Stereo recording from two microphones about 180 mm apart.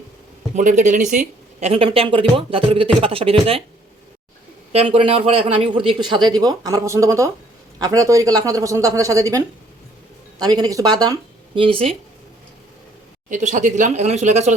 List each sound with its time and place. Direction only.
0.5 s a woman's voice: 45° right (ahead or behind)
1.7 s speech: 30° right (ahead or behind)
4.7 s speech: 30° right (ahead or behind)
13.3 s speech: 45° right (ahead or behind)